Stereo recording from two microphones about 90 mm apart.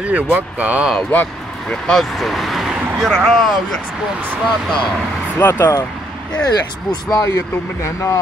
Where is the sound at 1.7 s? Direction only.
5° left (ahead or behind).